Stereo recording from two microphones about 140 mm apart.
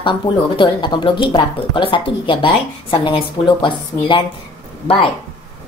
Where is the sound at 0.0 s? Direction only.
35° left (ahead or behind).